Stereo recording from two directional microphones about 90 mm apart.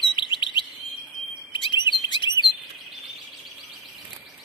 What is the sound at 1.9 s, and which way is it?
Chirp, 60° left (ahead or behind).